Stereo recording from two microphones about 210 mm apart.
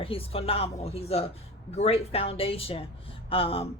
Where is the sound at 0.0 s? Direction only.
25° left (ahead or behind).